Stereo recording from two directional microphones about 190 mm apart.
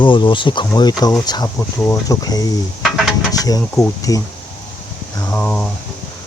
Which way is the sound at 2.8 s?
Centre (ahead or behind).